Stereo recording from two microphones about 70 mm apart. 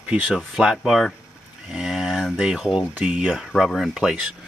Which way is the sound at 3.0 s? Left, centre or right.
Centre.